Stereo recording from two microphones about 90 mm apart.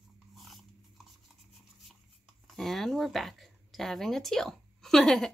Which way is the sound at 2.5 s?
Centre (ahead or behind).